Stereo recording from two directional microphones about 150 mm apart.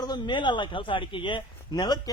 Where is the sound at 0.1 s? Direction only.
30° left (ahead or behind).